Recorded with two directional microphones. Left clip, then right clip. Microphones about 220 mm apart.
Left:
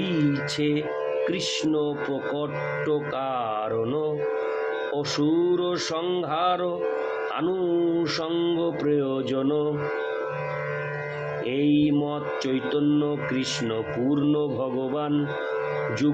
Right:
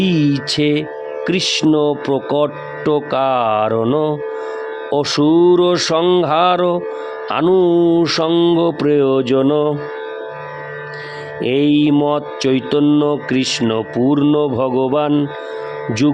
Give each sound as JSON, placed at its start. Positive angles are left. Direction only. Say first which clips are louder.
{"t": 0.0, "sound": "speech", "louder": "right 8 dB", "side_deg": -50}
{"t": 11.4, "sound": "speech", "louder": "right 9 dB", "side_deg": -50}